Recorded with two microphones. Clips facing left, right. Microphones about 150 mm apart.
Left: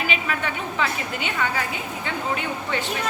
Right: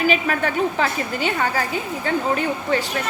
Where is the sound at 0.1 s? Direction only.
40° right (ahead or behind).